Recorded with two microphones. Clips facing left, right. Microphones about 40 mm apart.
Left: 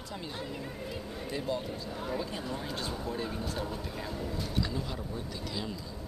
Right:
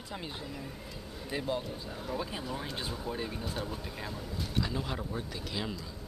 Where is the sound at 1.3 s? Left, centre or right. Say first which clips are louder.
Even; centre.